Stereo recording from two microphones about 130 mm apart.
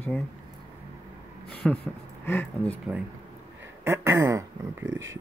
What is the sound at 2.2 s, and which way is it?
Speech, 15° left (ahead or behind).